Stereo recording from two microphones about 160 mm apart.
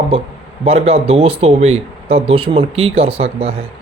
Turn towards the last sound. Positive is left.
turn(degrees=-40)  # may be behind; listen again after turning